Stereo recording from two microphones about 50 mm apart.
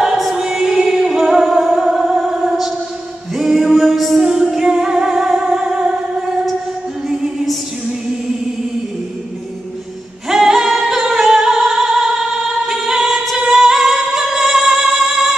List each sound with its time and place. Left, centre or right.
0.4 s music: centre
10.2 s music: centre